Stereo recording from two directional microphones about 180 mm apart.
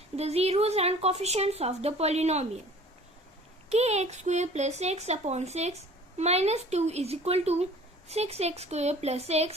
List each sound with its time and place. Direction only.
0.2 s speech: 35° right (ahead or behind)
3.7 s speech: 35° right (ahead or behind)